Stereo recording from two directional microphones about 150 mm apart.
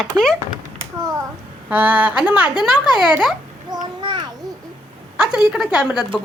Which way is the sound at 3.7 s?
30° right (ahead or behind).